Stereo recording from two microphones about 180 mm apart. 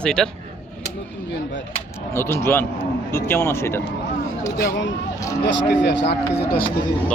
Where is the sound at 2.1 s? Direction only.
15° left (ahead or behind).